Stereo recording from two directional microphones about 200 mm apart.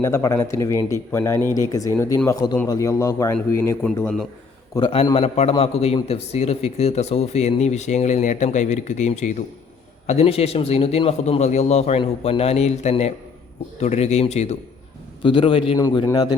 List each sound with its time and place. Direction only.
0.0 s a man's voice: 15° left (ahead or behind)
4.7 s a man's voice: 25° left (ahead or behind)